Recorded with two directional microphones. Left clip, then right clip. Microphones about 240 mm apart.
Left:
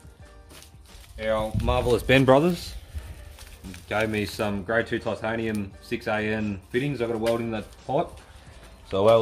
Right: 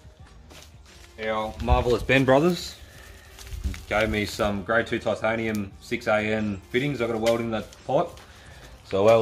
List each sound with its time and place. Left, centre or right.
1.3 s speech: left
2.3 s speech: centre
3.9 s speech: centre